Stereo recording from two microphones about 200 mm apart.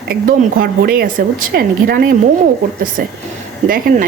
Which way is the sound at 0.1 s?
50° right (ahead or behind).